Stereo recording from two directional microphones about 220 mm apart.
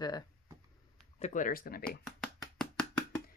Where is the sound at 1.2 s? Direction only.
35° left (ahead or behind).